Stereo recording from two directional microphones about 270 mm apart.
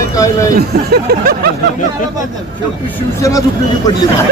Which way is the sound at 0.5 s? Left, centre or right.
Right.